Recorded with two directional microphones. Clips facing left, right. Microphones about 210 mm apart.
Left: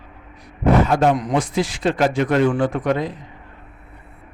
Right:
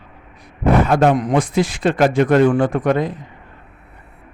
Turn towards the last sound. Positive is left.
turn(degrees=-50)  # may be behind; listen again after turning